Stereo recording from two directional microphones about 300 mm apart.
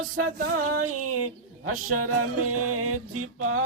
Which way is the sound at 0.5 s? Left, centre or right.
Right.